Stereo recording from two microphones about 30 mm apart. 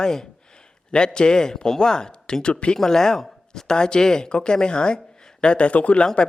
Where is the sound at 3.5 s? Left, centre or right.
Left.